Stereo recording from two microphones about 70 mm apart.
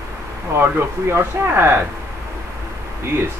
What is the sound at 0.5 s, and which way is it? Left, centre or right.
Speech, right.